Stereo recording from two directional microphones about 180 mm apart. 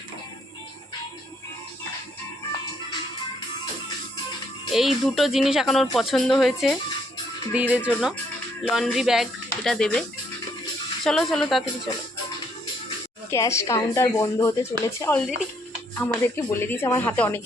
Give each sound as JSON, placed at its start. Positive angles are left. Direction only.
{"t": 4.7, "sound": "speech", "side_deg": 0}
{"t": 11.0, "sound": "speech", "side_deg": 0}
{"t": 13.3, "sound": "speech", "side_deg": 15}